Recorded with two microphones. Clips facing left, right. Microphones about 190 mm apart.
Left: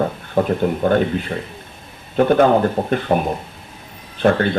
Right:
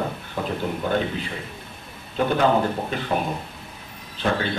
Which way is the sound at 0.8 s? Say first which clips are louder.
Left 7 dB; 55° left (ahead or behind).